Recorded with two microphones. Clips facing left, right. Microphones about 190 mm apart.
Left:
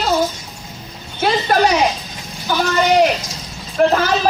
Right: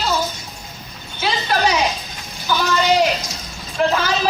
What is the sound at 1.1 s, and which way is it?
A woman's voice, 50° left (ahead or behind).